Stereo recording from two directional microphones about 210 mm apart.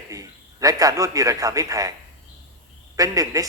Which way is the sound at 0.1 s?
15° right (ahead or behind).